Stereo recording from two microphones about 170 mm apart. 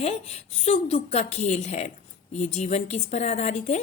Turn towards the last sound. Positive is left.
turn(degrees=40)  # may be behind; listen again after turning